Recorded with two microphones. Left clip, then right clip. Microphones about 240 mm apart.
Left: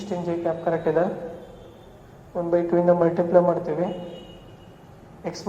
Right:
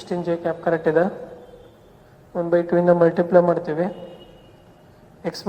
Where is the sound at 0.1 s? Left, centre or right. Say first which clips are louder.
Right 2 dB; right.